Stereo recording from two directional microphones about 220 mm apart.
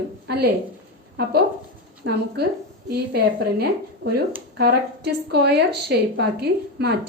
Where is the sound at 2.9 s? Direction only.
45° right (ahead or behind).